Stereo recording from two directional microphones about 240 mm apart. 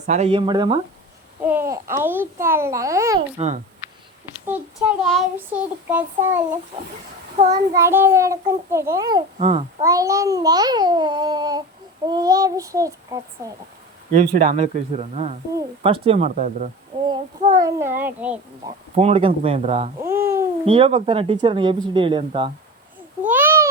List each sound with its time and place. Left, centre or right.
0.0 s a child's voice: right
4.4 s child singing: centre
7.5 s a child's voice: centre
14.3 s speech: right
17.6 s a child's voice: centre
18.6 s speech: right
20.0 s a child's voice: centre
20.7 s speech: right
23.2 s a sound: centre